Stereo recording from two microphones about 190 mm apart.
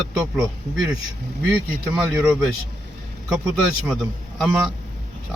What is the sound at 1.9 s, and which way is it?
Speech, 5° right (ahead or behind).